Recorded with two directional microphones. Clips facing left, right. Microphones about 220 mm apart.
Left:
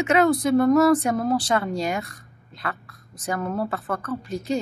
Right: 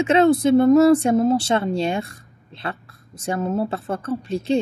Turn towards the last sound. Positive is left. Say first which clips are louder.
# right 5 dB
turn(degrees=-30)  # may be behind; listen again after turning